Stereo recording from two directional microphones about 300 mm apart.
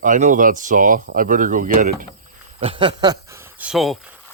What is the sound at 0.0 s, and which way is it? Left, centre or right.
Speech, right.